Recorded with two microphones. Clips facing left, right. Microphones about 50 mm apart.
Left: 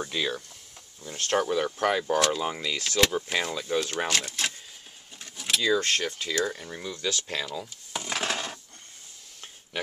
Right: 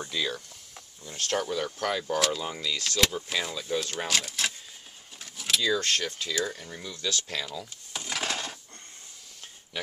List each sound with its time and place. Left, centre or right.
0.0 s speech: left
2.1 s speech: centre
2.4 s speech: centre
4.1 s speech: centre
5.2 s a sound: centre
5.6 s speech: centre
7.5 s wood: centre
8.2 s dishes: centre